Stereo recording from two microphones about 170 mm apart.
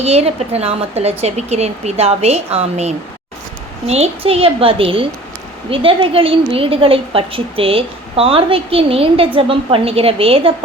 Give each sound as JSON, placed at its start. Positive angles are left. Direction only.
{"t": 0.0, "sound": "a woman's voice", "side_deg": -40}